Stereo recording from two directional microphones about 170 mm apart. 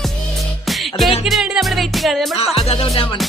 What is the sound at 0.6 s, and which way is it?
Music, centre (ahead or behind).